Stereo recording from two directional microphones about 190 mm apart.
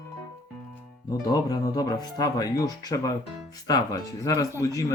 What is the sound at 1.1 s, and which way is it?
A man's voice, 20° left (ahead or behind).